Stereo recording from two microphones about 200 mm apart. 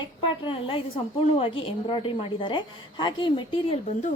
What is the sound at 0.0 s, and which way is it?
A woman's voice, 25° left (ahead or behind).